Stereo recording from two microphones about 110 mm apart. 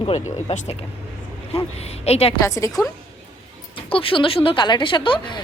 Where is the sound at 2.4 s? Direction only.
30° left (ahead or behind).